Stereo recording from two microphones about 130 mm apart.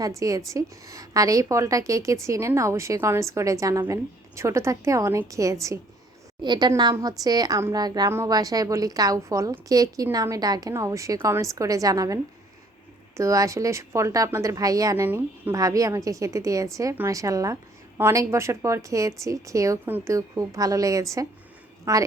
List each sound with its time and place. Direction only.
0.2 s a woman's voice: 25° right (ahead or behind)